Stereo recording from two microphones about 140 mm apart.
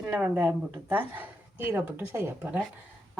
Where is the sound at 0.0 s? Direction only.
10° right (ahead or behind).